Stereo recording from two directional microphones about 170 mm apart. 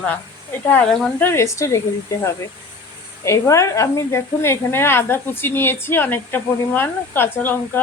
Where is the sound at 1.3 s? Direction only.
15° left (ahead or behind).